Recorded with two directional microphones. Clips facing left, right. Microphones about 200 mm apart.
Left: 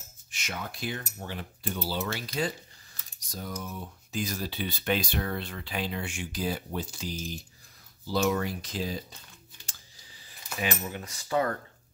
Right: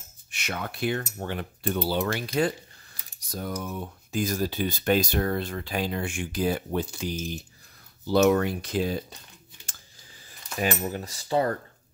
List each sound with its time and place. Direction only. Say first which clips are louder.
0.3 s speech: right 4 dB; 60° right (ahead or behind)
1.1 s cutlery: right 6 dB; 60° right (ahead or behind)
3.3 s speech: right 5 dB; 55° right (ahead or behind)
8.1 s cutlery: right 7 dB; 60° right (ahead or behind)
9.7 s cutlery: right 2 dB; 50° right (ahead or behind); by 11.5 s 30° right (ahead or behind)